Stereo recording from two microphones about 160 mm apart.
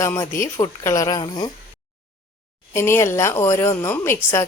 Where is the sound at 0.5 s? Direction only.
20° left (ahead or behind).